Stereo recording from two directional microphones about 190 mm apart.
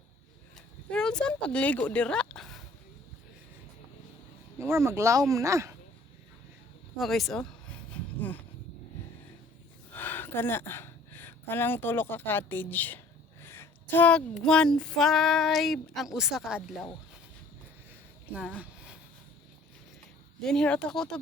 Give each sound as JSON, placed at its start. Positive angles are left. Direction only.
{"t": 0.5, "sound": "a sound", "side_deg": 5}
{"t": 4.5, "sound": "speech", "side_deg": -15}
{"t": 6.9, "sound": "speech", "side_deg": 0}
{"t": 9.9, "sound": "a woman's voice", "side_deg": 10}
{"t": 13.4, "sound": "female singing", "side_deg": 10}
{"t": 18.3, "sound": "speech", "side_deg": -10}
{"t": 18.6, "sound": "a sound", "side_deg": -5}
{"t": 20.4, "sound": "female singing", "side_deg": 5}